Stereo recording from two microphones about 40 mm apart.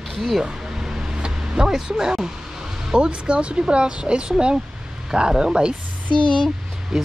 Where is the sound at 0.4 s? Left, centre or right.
Centre.